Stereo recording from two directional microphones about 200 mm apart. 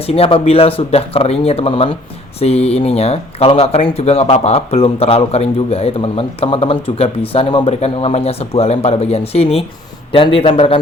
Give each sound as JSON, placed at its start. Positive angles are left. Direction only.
{"t": 0.0, "sound": "speech", "side_deg": 30}